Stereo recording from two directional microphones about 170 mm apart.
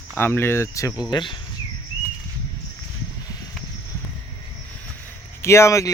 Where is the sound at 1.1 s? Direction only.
30° left (ahead or behind).